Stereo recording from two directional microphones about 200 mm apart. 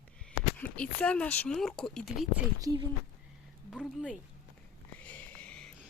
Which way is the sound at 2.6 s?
20° right (ahead or behind).